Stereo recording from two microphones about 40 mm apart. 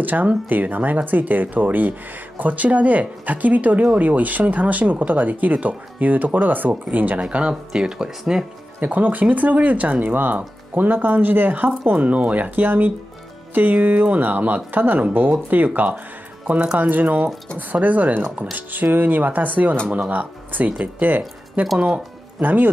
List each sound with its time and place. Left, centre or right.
0.0 s speech: right
7.2 s speech: right
8.8 s speech: right
11.8 s speech: right
12.4 s speech: right